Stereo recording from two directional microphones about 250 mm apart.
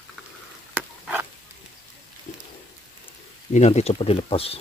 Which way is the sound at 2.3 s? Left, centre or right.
Left.